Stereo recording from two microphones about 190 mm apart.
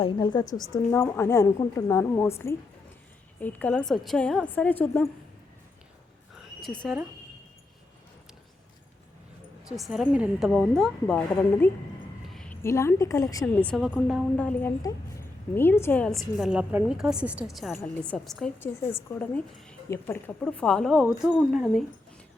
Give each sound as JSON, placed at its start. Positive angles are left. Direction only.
{"t": 0.0, "sound": "a woman's voice", "side_deg": 20}
{"t": 6.6, "sound": "a woman's voice", "side_deg": 0}
{"t": 9.6, "sound": "a woman's voice", "side_deg": 0}
{"t": 12.3, "sound": "a sound", "side_deg": 5}
{"t": 12.6, "sound": "a woman's voice", "side_deg": 15}
{"t": 13.7, "sound": "a woman's voice", "side_deg": -5}
{"t": 14.3, "sound": "a woman's voice", "side_deg": 10}